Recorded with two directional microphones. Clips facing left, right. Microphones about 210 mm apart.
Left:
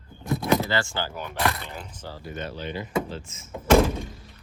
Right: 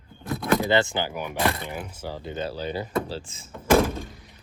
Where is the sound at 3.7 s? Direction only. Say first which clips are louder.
Left 1 dB; centre (ahead or behind).